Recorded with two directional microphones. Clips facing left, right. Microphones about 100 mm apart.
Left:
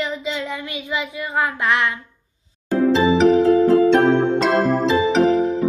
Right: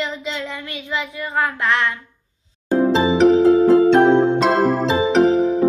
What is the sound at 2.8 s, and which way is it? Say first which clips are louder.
Music: left 1 dB; 25° right (ahead or behind).